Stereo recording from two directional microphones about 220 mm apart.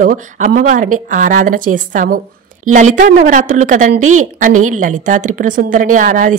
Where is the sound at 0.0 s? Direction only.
35° right (ahead or behind).